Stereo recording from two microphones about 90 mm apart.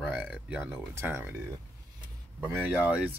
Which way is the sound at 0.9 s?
25° right (ahead or behind).